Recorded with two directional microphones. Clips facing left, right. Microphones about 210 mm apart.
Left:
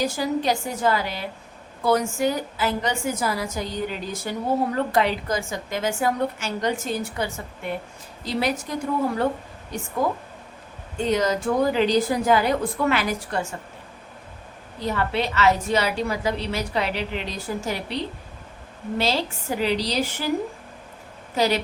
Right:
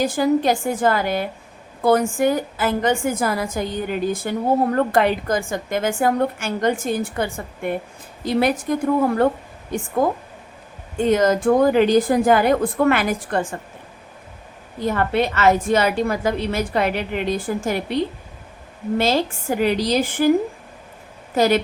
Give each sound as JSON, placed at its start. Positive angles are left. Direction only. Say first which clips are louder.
{"t": 0.0, "sound": "a woman's voice", "louder": "right 6 dB", "side_deg": -50}
{"t": 10.9, "sound": "a woman's voice", "louder": "right 5 dB", "side_deg": -50}
{"t": 14.8, "sound": "a woman's voice", "louder": "right 5 dB", "side_deg": -50}
{"t": 21.3, "sound": "a woman's voice", "louder": "right 5 dB", "side_deg": -50}